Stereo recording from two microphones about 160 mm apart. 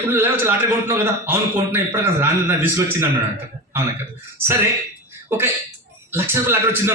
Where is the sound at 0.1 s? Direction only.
15° right (ahead or behind).